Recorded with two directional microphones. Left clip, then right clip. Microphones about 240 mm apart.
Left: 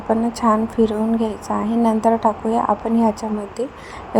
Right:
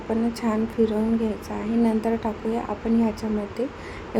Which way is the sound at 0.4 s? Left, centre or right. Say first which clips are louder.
Left 8 dB; centre.